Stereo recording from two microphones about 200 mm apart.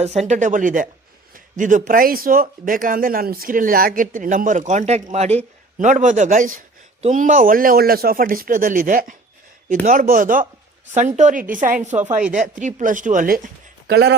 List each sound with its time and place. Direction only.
0.0 s speech: 35° right (ahead or behind); by 14.2 s 55° right (ahead or behind)